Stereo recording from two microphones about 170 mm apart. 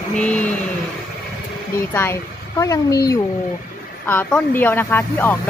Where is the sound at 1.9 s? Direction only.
15° left (ahead or behind).